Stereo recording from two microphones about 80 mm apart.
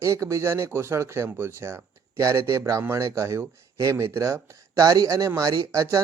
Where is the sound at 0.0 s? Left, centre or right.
Right.